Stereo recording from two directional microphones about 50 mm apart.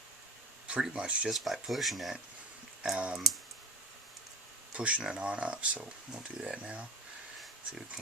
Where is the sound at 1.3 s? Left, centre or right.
Centre.